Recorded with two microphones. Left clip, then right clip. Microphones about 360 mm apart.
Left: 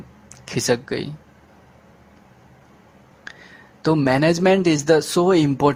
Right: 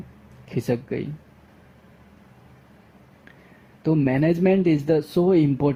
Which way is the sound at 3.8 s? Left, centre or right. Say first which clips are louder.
Left 4 dB; left.